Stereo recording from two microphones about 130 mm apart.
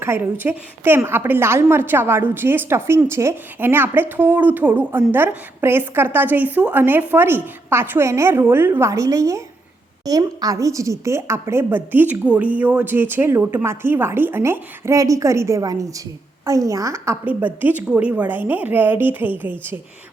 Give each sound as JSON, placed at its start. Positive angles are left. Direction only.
{"t": 0.0, "sound": "a woman's voice", "side_deg": -15}